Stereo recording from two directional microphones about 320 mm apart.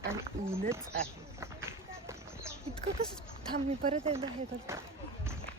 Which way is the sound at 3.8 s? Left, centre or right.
Centre.